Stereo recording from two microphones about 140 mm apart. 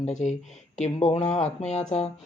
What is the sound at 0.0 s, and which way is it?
Speech, 55° left (ahead or behind).